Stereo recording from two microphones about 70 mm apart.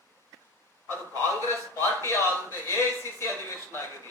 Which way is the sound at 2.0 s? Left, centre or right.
Left.